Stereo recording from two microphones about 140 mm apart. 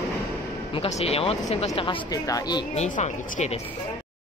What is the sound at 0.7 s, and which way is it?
Speech, 50° left (ahead or behind).